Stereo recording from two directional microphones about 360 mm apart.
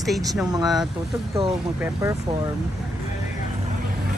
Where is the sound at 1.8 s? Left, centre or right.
Centre.